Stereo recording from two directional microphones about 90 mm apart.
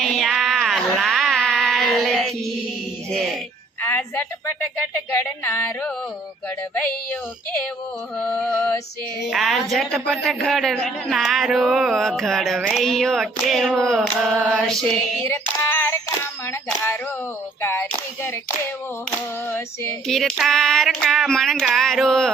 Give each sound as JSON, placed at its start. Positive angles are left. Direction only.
{"t": 0.0, "sound": "music", "side_deg": 0}
{"t": 0.4, "sound": "a sound", "side_deg": 0}
{"t": 3.1, "sound": "music", "side_deg": 5}
{"t": 3.8, "sound": "a woman's voice", "side_deg": 25}
{"t": 5.1, "sound": "music", "side_deg": 20}
{"t": 8.2, "sound": "mantra", "side_deg": 5}
{"t": 9.3, "sound": "a man's voice", "side_deg": 0}
{"t": 15.3, "sound": "child singing", "side_deg": 35}
{"t": 17.6, "sound": "a sound", "side_deg": 30}
{"t": 19.5, "sound": "music", "side_deg": 25}
{"t": 20.1, "sound": "a man's voice", "side_deg": 5}